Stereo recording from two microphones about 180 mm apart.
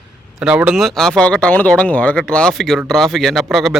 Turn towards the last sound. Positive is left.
turn(degrees=0)  # may be behind; listen again after turning